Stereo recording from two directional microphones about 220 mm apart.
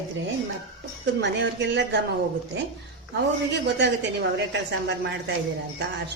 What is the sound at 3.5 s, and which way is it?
Speech, 50° right (ahead or behind).